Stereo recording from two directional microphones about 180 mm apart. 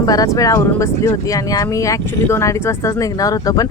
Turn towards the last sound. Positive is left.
turn(degrees=20)  # may be behind; listen again after turning